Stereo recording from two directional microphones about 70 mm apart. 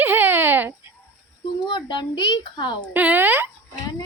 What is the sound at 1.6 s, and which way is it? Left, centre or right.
A child's voice, left.